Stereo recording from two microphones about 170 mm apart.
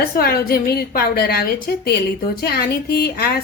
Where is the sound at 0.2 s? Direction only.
65° left (ahead or behind).